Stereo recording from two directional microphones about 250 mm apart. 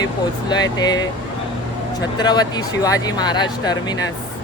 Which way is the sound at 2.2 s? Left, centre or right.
Centre.